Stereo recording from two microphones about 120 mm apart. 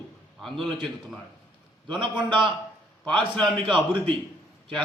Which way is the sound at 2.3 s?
40° right (ahead or behind).